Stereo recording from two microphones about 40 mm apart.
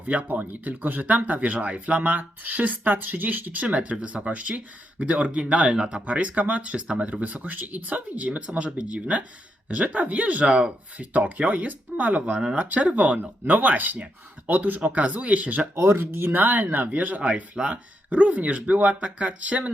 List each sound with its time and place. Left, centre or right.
0.0 s speech: right
6.1 s speech: right
12.3 s speech: right
12.5 s speech: right
13.5 s speech: right
15.7 s speech: right
16.3 s speech: right